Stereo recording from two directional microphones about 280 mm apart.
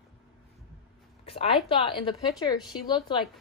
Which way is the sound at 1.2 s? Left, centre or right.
Left.